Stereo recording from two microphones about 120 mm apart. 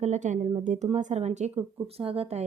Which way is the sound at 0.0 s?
85° right.